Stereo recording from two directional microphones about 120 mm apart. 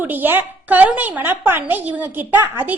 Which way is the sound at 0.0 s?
15° right (ahead or behind).